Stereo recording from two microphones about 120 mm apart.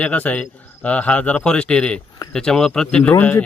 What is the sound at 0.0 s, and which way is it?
Speech, 10° left (ahead or behind).